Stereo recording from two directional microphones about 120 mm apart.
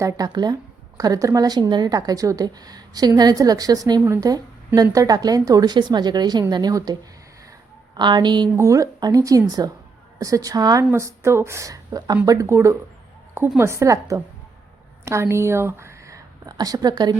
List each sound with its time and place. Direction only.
0.0 s a woman's voice: 30° right (ahead or behind)
7.9 s a woman's voice: 40° right (ahead or behind)
8.5 s a woman's voice: 25° right (ahead or behind)